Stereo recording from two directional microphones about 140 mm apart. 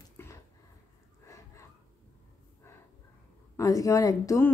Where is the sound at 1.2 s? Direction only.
20° left (ahead or behind).